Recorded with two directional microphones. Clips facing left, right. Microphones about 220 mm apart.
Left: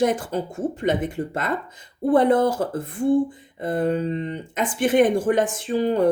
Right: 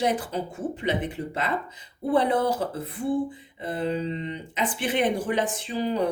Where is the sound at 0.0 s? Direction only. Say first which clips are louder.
Left 4 dB; 50° left (ahead or behind).